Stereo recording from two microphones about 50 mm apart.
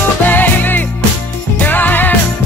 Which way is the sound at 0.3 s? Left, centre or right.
Left.